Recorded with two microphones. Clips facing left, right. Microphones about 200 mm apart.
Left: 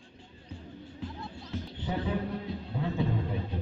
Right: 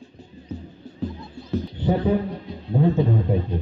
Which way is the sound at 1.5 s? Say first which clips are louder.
Right 14 dB; 35° right (ahead or behind).